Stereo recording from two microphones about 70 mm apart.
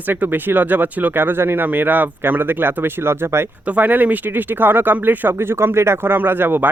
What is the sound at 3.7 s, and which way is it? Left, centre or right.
Speech, right.